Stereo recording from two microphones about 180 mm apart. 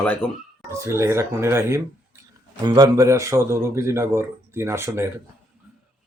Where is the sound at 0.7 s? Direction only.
15° right (ahead or behind).